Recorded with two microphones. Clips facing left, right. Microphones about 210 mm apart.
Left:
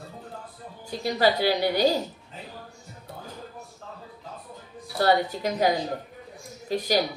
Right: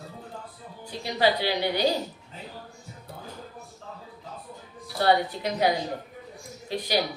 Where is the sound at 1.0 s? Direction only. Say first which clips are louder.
Left 2 dB; 45° left (ahead or behind).